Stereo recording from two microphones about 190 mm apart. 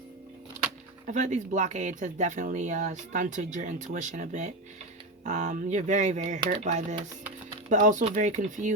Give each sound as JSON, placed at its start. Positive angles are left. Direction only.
{"t": 1.0, "sound": "speech", "side_deg": -40}